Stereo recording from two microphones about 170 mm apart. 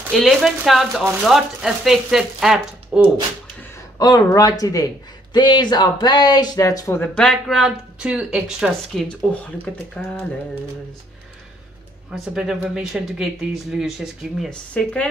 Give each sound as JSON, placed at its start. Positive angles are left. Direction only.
{"t": 0.1, "sound": "speech", "side_deg": 0}
{"t": 4.0, "sound": "speech", "side_deg": 20}
{"t": 12.1, "sound": "speech", "side_deg": -5}